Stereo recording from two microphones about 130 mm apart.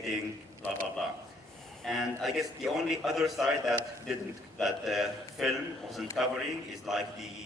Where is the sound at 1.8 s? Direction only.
Centre (ahead or behind).